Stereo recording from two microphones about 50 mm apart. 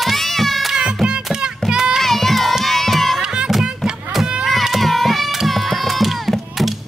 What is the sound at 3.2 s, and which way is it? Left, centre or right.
Music, centre.